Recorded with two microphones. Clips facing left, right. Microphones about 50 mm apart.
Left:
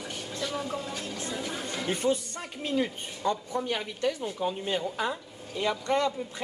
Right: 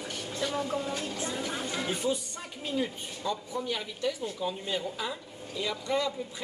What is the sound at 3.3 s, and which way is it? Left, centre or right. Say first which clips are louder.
Speech: left 4 dB; left.